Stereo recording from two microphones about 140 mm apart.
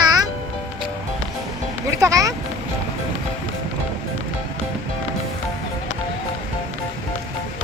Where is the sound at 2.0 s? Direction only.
25° right (ahead or behind).